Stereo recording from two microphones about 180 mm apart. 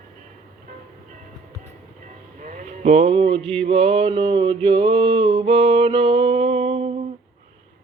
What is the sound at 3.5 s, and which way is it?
Mantra, 35° right (ahead or behind).